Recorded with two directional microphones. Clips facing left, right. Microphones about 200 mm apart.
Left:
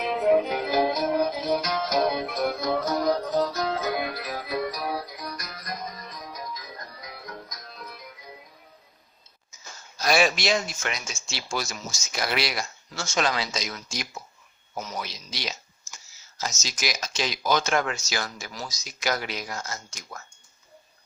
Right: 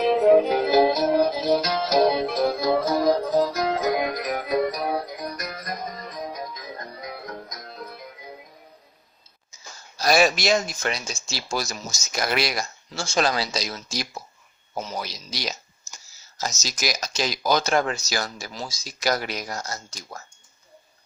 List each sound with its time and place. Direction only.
0.0 s music: 35° right (ahead or behind)
4.4 s music: 50° right (ahead or behind)
10.0 s speech: 40° right (ahead or behind)
12.9 s speech: 30° right (ahead or behind)